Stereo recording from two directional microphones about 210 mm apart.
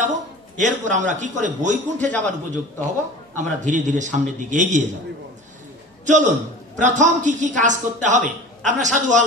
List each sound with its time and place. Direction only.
0.6 s a man's voice: 35° right (ahead or behind)
6.0 s a man's voice: 35° right (ahead or behind)